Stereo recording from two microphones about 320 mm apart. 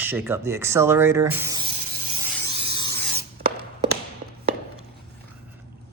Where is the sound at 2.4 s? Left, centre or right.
Centre.